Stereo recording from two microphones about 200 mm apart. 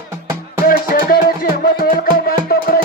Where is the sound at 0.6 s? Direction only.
45° left (ahead or behind).